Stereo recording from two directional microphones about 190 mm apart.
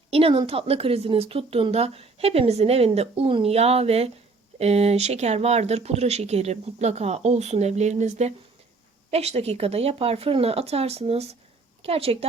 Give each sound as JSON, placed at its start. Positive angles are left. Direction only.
{"t": 0.1, "sound": "speech", "side_deg": -30}